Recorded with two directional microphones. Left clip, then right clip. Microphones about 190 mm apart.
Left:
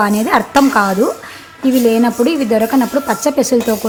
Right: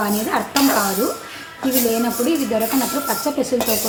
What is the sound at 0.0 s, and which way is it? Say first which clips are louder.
Speech: left 7 dB; 55° left (ahead or behind).